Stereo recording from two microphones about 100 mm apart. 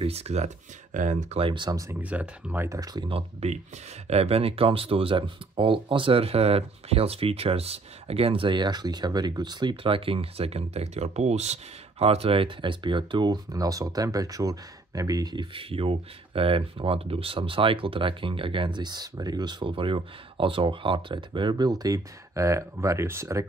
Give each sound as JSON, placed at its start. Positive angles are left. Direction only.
{"t": 0.0, "sound": "speech", "side_deg": -90}
{"t": 1.3, "sound": "speech", "side_deg": -60}
{"t": 1.7, "sound": "speech", "side_deg": -35}
{"t": 2.0, "sound": "speech", "side_deg": -15}
{"t": 2.7, "sound": "speech", "side_deg": -40}
{"t": 3.1, "sound": "speech", "side_deg": -80}
{"t": 15.5, "sound": "speech", "side_deg": -65}
{"t": 19.6, "sound": "speech", "side_deg": -60}